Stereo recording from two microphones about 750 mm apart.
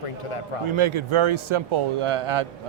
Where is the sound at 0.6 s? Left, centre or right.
Right.